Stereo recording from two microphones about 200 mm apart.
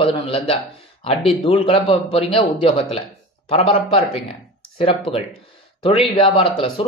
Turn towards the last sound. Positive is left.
turn(degrees=30)  # may be behind; listen again after turning